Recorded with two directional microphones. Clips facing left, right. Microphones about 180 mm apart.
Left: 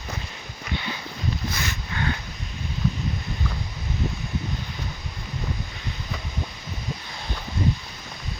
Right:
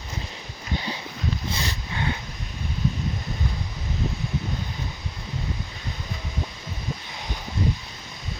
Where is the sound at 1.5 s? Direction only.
30° right (ahead or behind).